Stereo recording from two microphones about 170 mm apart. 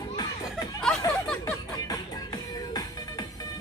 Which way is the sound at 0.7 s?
5° left (ahead or behind).